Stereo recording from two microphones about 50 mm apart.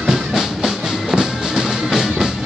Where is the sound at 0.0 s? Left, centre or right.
Centre.